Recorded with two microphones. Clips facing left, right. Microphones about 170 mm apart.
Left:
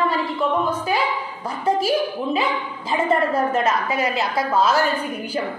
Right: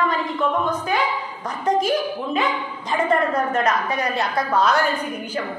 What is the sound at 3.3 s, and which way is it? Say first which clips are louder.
A woman's voice: left 1 dB; 5° left (ahead or behind).